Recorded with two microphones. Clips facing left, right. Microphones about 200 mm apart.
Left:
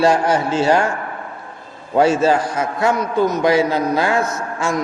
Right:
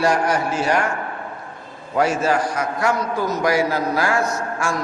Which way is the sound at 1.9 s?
25° left (ahead or behind).